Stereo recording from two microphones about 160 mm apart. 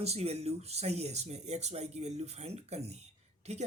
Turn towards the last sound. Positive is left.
turn(degrees=-40)  # may be behind; listen again after turning